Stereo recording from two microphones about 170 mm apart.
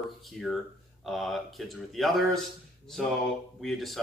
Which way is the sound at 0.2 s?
Centre (ahead or behind).